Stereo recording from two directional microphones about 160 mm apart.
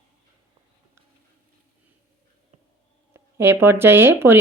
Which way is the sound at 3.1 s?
15° right (ahead or behind).